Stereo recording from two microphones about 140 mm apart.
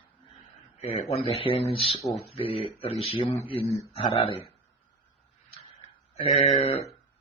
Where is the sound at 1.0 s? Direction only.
50° left (ahead or behind).